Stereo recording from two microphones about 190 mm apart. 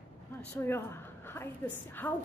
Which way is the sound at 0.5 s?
15° left (ahead or behind).